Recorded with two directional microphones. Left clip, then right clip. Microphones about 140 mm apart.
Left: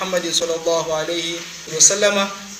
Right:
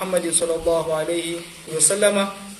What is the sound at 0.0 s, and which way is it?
A man's voice, 5° right (ahead or behind).